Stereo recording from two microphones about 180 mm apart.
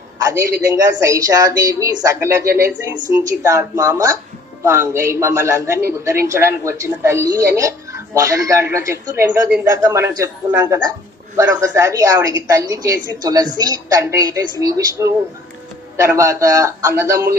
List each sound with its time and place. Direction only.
0.3 s a woman's voice: 20° right (ahead or behind)